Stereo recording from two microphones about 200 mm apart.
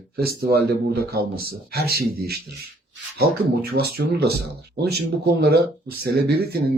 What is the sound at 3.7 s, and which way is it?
A man's voice, 50° right (ahead or behind).